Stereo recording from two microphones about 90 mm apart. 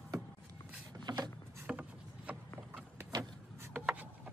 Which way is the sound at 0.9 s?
55° right (ahead or behind).